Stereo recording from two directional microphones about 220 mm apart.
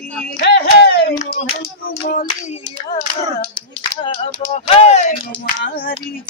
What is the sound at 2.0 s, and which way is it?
Clapping, 35° left (ahead or behind).